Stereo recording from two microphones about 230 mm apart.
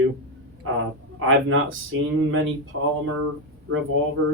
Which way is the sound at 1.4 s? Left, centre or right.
Right.